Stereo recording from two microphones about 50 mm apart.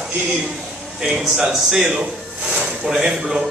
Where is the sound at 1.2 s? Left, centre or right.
Centre.